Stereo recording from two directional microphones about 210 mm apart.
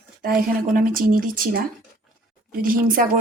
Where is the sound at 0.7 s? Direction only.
40° right (ahead or behind).